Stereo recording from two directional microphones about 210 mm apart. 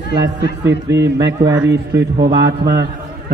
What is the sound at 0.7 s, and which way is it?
A man's voice, 55° right (ahead or behind).